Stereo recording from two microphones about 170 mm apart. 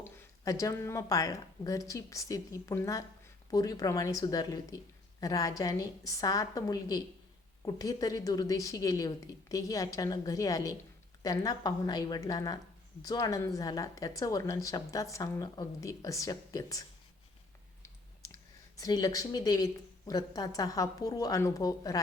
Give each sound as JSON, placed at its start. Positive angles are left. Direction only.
{"t": 0.2, "sound": "a woman's voice", "side_deg": 20}
{"t": 18.8, "sound": "a woman's voice", "side_deg": 20}